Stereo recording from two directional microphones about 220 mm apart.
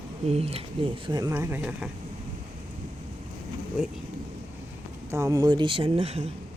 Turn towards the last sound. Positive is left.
turn(degrees=-25)  # may be behind; listen again after turning